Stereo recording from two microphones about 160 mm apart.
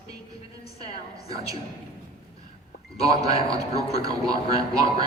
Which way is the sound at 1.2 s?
20° right (ahead or behind).